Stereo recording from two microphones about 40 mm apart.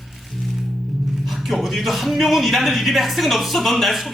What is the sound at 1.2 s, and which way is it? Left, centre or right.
A man's voice, centre.